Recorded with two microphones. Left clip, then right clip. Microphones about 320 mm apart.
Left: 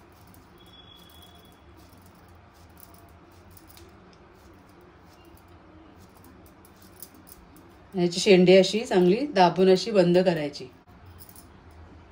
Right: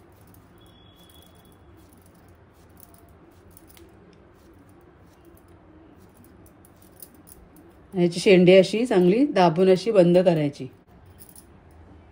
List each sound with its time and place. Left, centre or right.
7.9 s speech: right